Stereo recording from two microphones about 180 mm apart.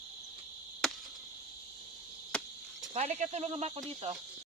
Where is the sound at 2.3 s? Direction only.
5° left (ahead or behind).